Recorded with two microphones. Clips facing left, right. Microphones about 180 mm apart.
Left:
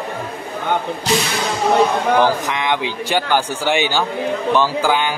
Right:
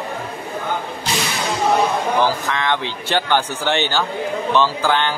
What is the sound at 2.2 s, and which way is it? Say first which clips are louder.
A man's voice: left 2 dB; 15° left (ahead or behind).